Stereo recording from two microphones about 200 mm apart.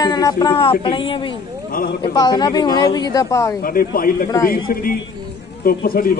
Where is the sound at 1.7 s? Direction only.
45° left (ahead or behind).